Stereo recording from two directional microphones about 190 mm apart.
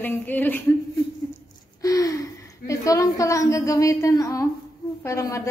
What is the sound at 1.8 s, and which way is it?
Gasp, 20° left (ahead or behind).